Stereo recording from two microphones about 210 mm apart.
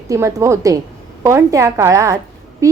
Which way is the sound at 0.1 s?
15° right (ahead or behind).